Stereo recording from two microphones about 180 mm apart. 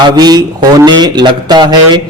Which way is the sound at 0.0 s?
25° right (ahead or behind).